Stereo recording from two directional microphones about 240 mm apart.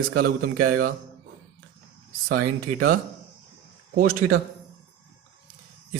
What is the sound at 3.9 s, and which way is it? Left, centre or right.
Speech, right.